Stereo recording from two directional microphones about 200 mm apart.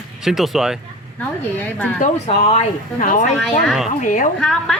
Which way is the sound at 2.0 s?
30° left (ahead or behind).